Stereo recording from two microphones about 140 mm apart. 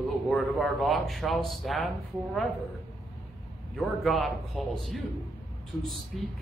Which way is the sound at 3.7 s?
Centre (ahead or behind).